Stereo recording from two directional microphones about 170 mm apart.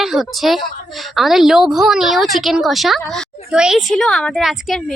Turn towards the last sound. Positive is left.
turn(degrees=0)  # may be behind; listen again after turning